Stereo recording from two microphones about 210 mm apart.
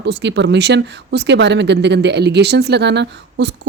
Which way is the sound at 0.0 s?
55° right (ahead or behind).